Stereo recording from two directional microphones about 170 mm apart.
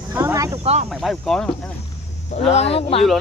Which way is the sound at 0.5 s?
40° right (ahead or behind).